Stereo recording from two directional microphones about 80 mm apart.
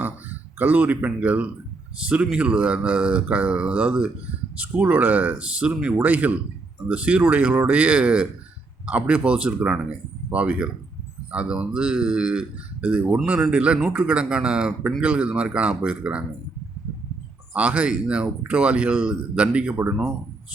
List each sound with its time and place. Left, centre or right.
0.0 s a sound: right
2.2 s speech: centre
17.5 s speech: centre